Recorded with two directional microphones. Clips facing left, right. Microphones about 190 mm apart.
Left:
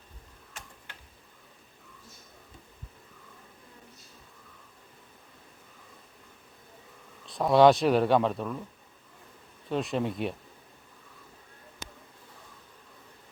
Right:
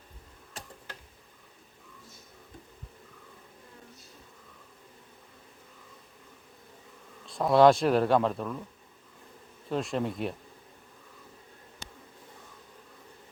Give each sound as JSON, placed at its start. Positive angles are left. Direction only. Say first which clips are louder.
{"t": 0.6, "sound": "a sound", "louder": "right 3 dB", "side_deg": -35}
{"t": 7.3, "sound": "speech", "louder": "left 1 dB", "side_deg": 0}
{"t": 9.6, "sound": "speech", "louder": "left 1 dB", "side_deg": 0}